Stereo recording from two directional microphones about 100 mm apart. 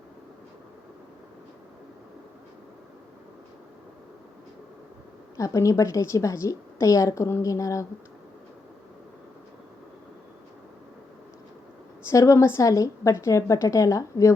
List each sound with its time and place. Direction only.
5.4 s a woman's voice: 30° left (ahead or behind)
12.0 s a woman's voice: 30° left (ahead or behind)